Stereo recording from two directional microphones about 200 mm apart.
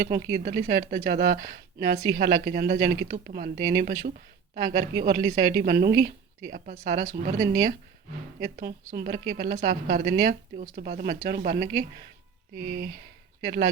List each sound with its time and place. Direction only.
0.0 s a woman's voice: 50° right (ahead or behind)
7.3 s a woman's voice: 50° right (ahead or behind)